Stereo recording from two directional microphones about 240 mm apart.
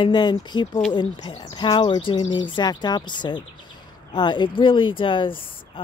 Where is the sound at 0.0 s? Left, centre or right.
Centre.